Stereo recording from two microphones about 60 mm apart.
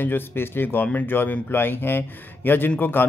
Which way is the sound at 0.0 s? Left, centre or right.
Left.